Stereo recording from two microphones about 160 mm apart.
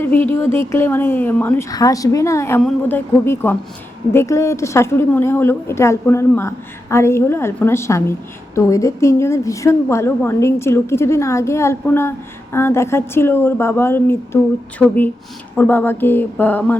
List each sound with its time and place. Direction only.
0.0 s a woman's voice: 10° left (ahead or behind)
1.7 s a woman's voice: 20° left (ahead or behind)
2.6 s a woman's voice: 5° left (ahead or behind)
3.2 s a woman's voice: 15° left (ahead or behind)